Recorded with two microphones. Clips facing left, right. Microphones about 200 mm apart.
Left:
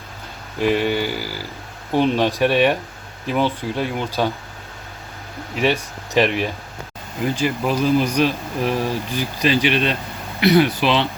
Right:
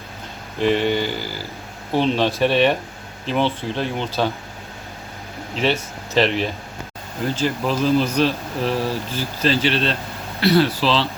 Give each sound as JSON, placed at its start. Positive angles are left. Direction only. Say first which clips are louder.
{"t": 0.6, "sound": "speech", "louder": "even", "side_deg": 10}
{"t": 5.5, "sound": "speech", "louder": "left 1 dB", "side_deg": 15}